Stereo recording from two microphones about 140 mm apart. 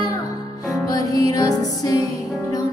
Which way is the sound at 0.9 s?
25° left (ahead or behind).